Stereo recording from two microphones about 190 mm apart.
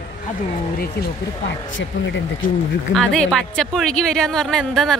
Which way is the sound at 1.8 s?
70° left (ahead or behind).